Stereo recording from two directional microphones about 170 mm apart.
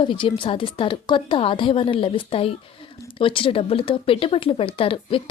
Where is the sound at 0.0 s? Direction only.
30° left (ahead or behind).